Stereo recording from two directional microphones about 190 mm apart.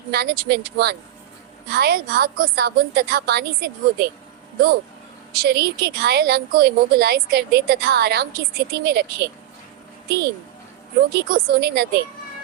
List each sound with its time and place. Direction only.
0.1 s a woman's voice: 55° right (ahead or behind)
5.3 s a woman's voice: 55° right (ahead or behind)